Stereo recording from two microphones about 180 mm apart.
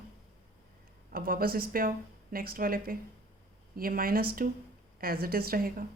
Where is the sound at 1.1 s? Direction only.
55° right (ahead or behind).